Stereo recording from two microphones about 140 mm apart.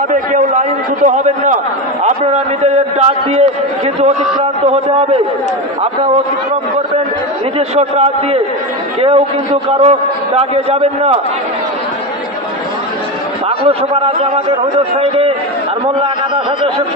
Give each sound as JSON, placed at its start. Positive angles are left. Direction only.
{"t": 0.1, "sound": "a man's voice", "side_deg": -65}
{"t": 7.5, "sound": "a man's voice", "side_deg": -50}
{"t": 13.7, "sound": "a man's voice", "side_deg": -45}